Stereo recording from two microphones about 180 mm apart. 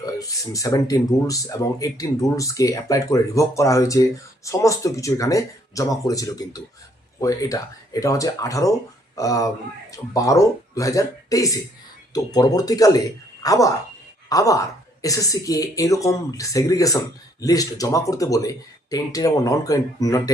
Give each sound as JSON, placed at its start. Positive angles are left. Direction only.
{"t": 0.0, "sound": "speech", "side_deg": 20}